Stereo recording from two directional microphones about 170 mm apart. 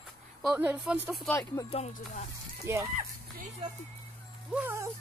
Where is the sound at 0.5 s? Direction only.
10° right (ahead or behind).